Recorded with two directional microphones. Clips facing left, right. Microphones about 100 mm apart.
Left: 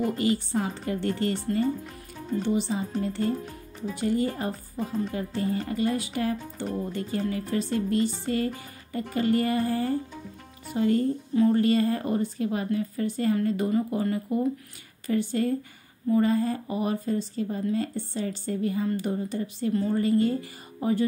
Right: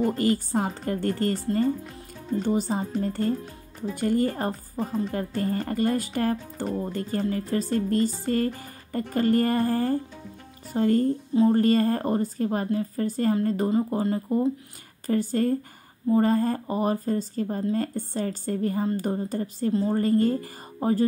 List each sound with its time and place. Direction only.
0.0 s speech: 40° right (ahead or behind)
15.0 s speech: 40° right (ahead or behind)